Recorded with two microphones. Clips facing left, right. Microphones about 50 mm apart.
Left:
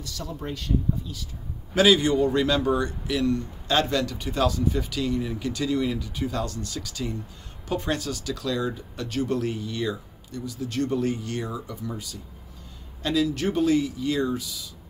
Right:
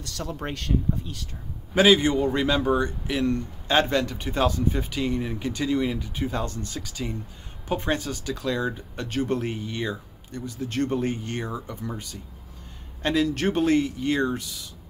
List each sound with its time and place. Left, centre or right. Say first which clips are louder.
0.0 s speech: right 2 dB; right
1.8 s a man's voice: even; right
13.0 s speech: right 1 dB; right